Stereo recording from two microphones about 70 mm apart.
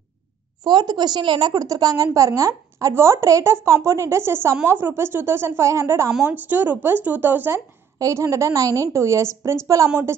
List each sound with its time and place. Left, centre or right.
0.7 s a woman's voice: right
2.1 s speech: right
2.9 s a woman's voice: right
6.2 s speech: right
8.0 s a woman's voice: right